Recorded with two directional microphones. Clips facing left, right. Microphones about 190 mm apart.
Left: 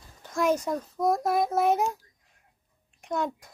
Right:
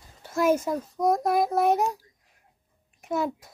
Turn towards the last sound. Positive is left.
turn(degrees=-5)  # may be behind; listen again after turning